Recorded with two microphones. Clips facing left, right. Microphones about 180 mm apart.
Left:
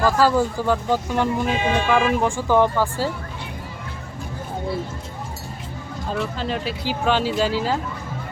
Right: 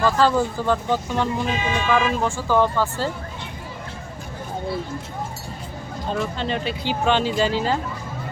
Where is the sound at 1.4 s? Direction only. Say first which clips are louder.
Left 3 dB; 55° left (ahead or behind).